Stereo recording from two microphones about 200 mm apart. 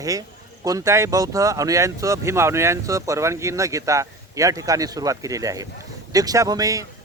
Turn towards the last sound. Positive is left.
turn(degrees=-15)  # may be behind; listen again after turning